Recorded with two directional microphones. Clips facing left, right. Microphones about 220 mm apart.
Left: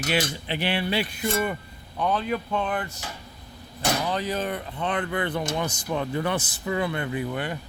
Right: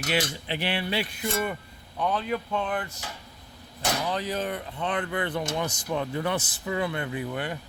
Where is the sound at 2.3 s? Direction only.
55° left (ahead or behind).